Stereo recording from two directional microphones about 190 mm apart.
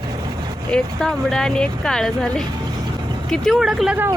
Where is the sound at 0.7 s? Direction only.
Centre (ahead or behind).